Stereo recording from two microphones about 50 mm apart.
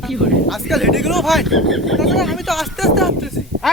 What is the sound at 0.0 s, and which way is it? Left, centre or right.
Speech, centre.